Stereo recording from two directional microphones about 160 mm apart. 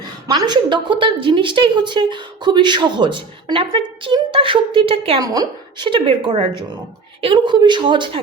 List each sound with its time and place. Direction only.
0.3 s a woman's voice: 25° right (ahead or behind)
5.2 s a woman's voice: 25° right (ahead or behind)